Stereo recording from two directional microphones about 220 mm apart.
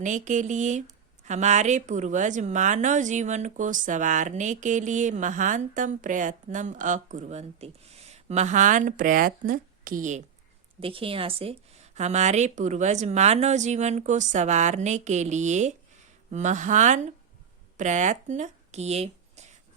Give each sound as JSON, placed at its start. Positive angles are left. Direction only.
{"t": 0.0, "sound": "a woman's voice", "side_deg": -35}